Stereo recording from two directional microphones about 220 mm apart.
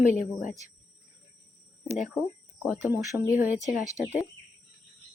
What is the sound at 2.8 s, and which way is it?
Speech, 15° right (ahead or behind).